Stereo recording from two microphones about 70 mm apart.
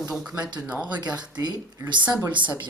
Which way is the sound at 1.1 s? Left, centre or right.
Right.